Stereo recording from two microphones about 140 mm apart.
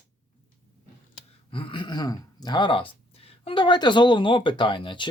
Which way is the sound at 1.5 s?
40° left (ahead or behind).